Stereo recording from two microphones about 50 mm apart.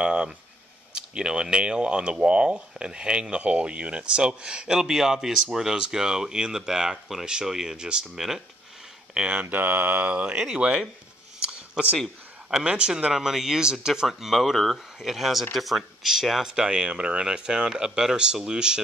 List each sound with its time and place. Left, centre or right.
0.0 s speech: centre
9.1 s speech: right
9.5 s speech: right; by 10.9 s centre
12.4 s speech: centre
14.0 s speech: centre